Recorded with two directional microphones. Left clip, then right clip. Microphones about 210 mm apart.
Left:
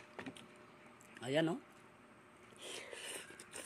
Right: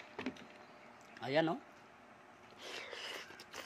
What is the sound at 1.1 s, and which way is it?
Speech, 20° left (ahead or behind).